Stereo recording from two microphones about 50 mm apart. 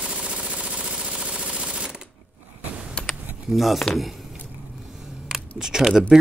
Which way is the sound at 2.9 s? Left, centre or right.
Centre.